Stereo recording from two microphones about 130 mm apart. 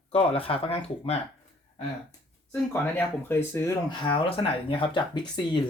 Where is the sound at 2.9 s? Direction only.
20° left (ahead or behind).